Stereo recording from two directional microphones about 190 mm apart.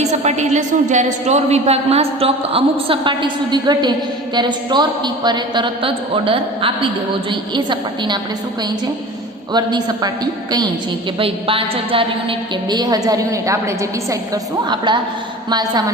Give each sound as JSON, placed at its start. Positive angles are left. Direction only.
{"t": 0.0, "sound": "a woman's voice", "side_deg": -35}
{"t": 9.5, "sound": "a woman's voice", "side_deg": -20}
{"t": 11.2, "sound": "a woman's voice", "side_deg": -30}
{"t": 15.4, "sound": "a woman's voice", "side_deg": -20}